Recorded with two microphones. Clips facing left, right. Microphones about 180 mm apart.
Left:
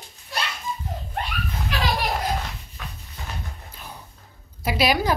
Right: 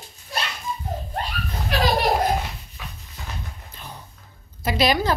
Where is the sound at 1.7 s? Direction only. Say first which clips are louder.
Right 6 dB; 40° right (ahead or behind).